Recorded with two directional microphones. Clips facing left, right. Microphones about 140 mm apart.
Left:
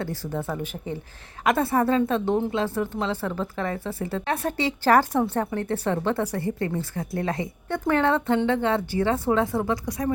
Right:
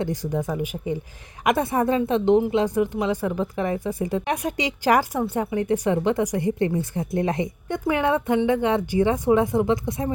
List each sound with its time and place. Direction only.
0.0 s a woman's voice: 15° right (ahead or behind)